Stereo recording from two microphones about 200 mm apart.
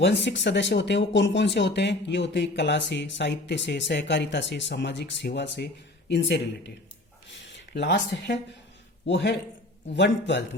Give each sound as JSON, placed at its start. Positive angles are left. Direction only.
{"t": 0.0, "sound": "speech", "side_deg": 60}
{"t": 7.3, "sound": "a sound", "side_deg": 65}
{"t": 9.0, "sound": "speech", "side_deg": 60}